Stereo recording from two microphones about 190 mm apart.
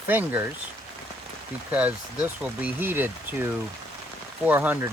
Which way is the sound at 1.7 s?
5° right (ahead or behind).